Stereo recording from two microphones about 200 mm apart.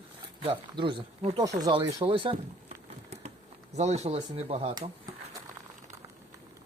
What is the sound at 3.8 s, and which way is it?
Speech, 35° right (ahead or behind).